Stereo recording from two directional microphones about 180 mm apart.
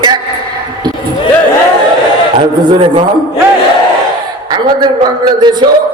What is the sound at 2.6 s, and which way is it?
Speech, 30° right (ahead or behind).